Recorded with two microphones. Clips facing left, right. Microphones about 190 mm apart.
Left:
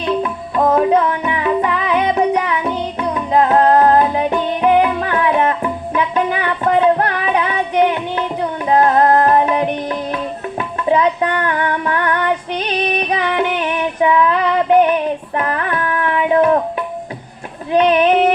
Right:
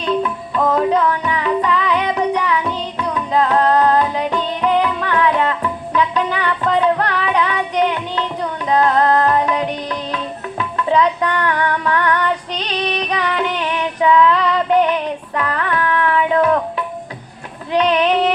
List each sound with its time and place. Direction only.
0.0 s music: 20° left (ahead or behind)
12.6 s female singing: 20° left (ahead or behind)
15.5 s carnatic music: 25° left (ahead or behind)
17.7 s child singing: 25° left (ahead or behind)